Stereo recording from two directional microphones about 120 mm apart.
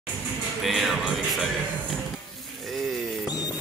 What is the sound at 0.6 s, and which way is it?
Music, centre (ahead or behind).